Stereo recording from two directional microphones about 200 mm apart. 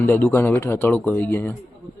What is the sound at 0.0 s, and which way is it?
Speech, 10° left (ahead or behind).